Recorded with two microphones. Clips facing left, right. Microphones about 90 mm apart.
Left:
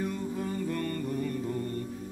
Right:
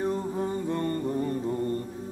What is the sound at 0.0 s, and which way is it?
Mantra, 35° right (ahead or behind).